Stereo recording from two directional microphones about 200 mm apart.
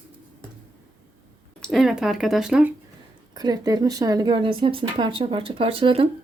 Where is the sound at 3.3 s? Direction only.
20° right (ahead or behind).